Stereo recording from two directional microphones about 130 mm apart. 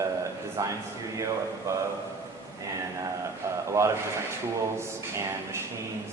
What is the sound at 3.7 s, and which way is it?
Speech, 20° right (ahead or behind).